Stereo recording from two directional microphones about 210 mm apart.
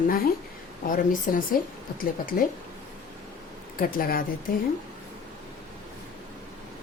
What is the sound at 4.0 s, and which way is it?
Speech, 45° left (ahead or behind).